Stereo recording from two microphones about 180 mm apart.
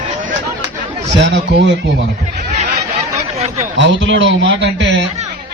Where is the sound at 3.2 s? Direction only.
35° right (ahead or behind).